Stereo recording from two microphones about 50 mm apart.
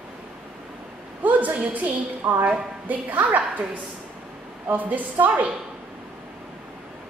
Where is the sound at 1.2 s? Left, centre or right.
Right.